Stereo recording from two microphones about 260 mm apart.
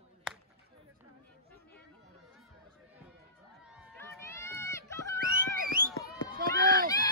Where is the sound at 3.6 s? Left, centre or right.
Centre.